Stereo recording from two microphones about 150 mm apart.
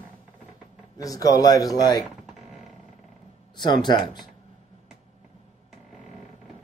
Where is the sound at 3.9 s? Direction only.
30° left (ahead or behind).